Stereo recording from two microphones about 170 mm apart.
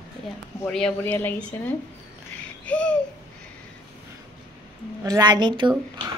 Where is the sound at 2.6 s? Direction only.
5° left (ahead or behind).